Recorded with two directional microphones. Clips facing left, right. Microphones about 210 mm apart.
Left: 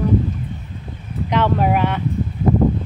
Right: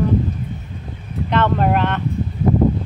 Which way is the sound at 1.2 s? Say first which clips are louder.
Even; 10° left (ahead or behind).